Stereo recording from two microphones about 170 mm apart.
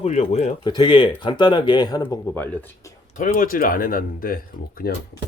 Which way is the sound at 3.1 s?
50° left (ahead or behind).